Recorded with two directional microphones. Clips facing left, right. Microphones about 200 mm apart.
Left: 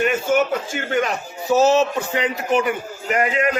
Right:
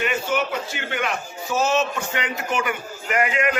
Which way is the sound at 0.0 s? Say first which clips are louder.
Left 5 dB; 50° left (ahead or behind).